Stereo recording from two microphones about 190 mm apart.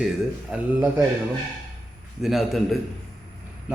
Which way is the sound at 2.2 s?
Centre (ahead or behind).